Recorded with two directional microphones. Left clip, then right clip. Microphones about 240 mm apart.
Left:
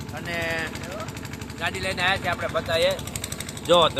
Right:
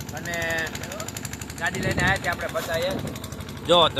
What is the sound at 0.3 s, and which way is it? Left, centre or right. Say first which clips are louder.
Speech: right 1 dB; centre.